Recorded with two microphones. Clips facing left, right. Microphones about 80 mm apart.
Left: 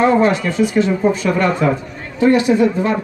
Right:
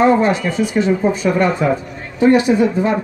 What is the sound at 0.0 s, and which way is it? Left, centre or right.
A man's voice, centre.